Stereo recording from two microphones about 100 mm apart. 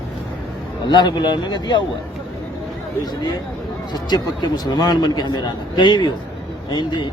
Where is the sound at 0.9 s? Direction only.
45° left (ahead or behind).